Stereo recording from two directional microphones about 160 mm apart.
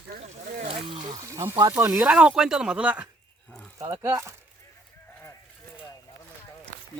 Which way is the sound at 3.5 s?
5° left (ahead or behind).